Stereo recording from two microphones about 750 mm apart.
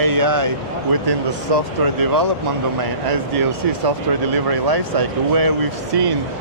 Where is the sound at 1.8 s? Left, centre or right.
Right.